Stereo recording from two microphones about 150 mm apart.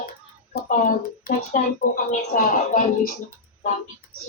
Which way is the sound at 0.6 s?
60° left (ahead or behind).